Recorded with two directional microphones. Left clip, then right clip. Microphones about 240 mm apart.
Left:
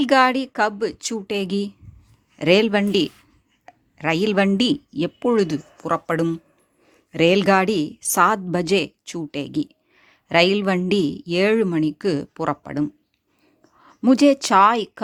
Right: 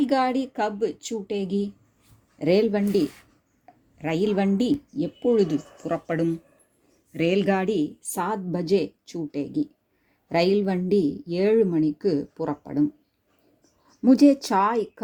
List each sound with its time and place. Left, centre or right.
0.0 s a woman's voice: left
14.0 s a woman's voice: left